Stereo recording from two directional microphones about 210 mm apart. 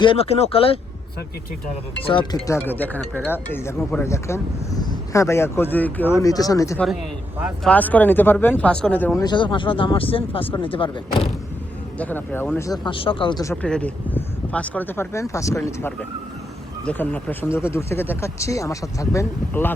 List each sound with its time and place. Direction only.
0.0 s speech: 25° left (ahead or behind)
2.0 s speech: 20° left (ahead or behind)
7.3 s speech: 5° right (ahead or behind)
7.7 s speech: 10° left (ahead or behind)
9.2 s speech: 20° left (ahead or behind)
11.9 s speech: 10° left (ahead or behind)